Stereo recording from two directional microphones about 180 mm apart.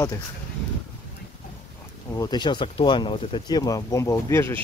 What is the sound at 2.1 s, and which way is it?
Speech, 25° left (ahead or behind).